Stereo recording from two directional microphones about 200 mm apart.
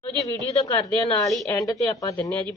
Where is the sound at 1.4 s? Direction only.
15° left (ahead or behind).